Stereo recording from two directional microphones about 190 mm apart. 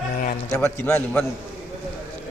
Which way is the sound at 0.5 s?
15° left (ahead or behind).